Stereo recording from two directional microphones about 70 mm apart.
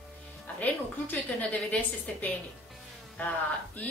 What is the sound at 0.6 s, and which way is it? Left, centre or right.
A woman's voice, left.